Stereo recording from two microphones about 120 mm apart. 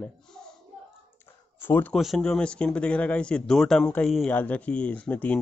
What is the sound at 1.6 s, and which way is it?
Speech, 15° left (ahead or behind).